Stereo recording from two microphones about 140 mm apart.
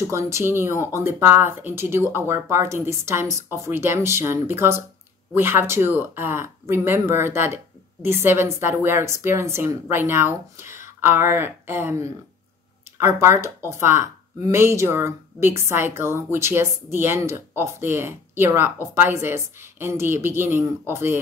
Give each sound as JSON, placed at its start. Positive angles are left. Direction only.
{"t": 0.1, "sound": "a woman's voice", "side_deg": -20}